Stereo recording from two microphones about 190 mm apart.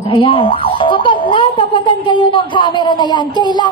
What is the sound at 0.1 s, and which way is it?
Speech, 25° left (ahead or behind).